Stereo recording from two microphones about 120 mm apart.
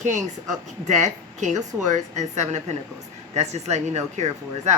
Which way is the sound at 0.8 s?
75° right (ahead or behind).